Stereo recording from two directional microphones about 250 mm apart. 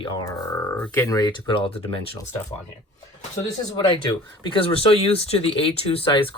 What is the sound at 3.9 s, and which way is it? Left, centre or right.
Speech, centre.